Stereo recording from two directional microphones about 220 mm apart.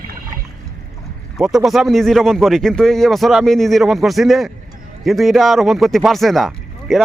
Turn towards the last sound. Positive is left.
turn(degrees=0)  # may be behind; listen again after turning